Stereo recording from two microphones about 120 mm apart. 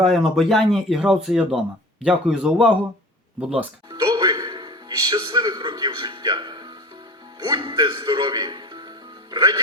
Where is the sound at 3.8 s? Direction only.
30° right (ahead or behind).